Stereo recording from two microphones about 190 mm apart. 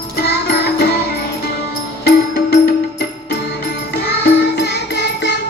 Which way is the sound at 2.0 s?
55° left (ahead or behind).